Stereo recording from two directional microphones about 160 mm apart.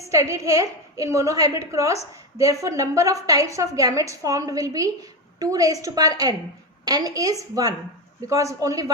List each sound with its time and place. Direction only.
0.1 s a woman's voice: 20° right (ahead or behind)